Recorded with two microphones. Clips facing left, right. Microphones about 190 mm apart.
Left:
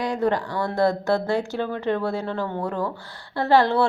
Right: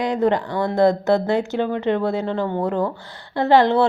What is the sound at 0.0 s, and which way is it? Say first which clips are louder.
A woman's voice: right 4 dB; 20° right (ahead or behind).